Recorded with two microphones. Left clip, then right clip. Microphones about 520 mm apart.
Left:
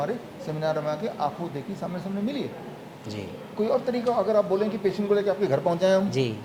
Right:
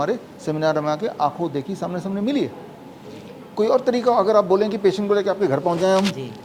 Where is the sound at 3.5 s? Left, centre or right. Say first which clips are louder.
Right 7 dB; right.